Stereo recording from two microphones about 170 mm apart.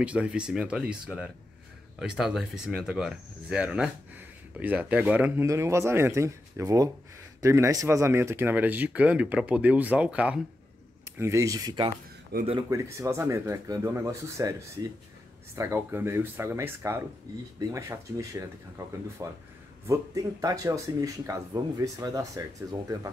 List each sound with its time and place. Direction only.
0.0 s speech: 5° right (ahead or behind); by 11.9 s 25° right (ahead or behind)
12.3 s speech: 60° right (ahead or behind)
12.6 s speech: 15° right (ahead or behind)